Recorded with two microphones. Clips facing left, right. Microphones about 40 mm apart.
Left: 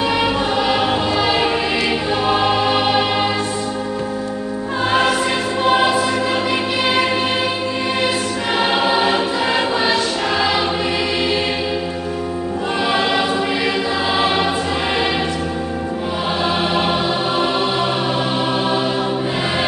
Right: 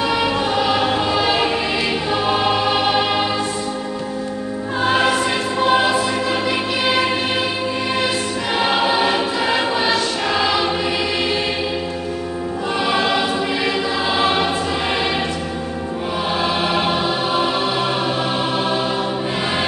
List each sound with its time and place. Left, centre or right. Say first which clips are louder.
0.0 s choir: left 1 dB; centre
4.8 s music: even; centre
8.5 s choir: left 1 dB; centre
12.8 s choir: left 1 dB; centre
16.7 s music: left 1 dB; centre